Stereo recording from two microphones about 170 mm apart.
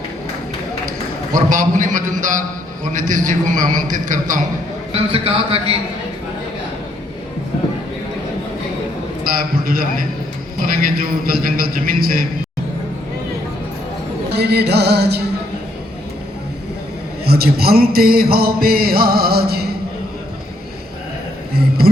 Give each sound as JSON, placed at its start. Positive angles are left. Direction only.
{"t": 1.5, "sound": "a man's voice", "side_deg": -50}
{"t": 5.1, "sound": "speech", "side_deg": -35}
{"t": 9.2, "sound": "a man's voice", "side_deg": -60}
{"t": 10.6, "sound": "mantra", "side_deg": -60}
{"t": 14.3, "sound": "music", "side_deg": -75}
{"t": 17.2, "sound": "mantra", "side_deg": -65}
{"t": 21.5, "sound": "a sound", "side_deg": -65}